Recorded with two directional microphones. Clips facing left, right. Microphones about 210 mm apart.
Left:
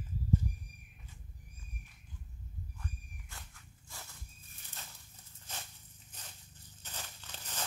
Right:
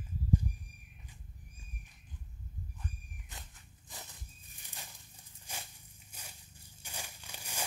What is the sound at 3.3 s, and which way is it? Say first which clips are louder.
Walk: right 2 dB; 20° right (ahead or behind).